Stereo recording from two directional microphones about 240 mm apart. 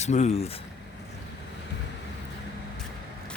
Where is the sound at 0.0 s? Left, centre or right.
Left.